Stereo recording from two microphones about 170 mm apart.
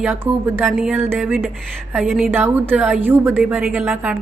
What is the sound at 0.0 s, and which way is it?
Speech, 10° right (ahead or behind).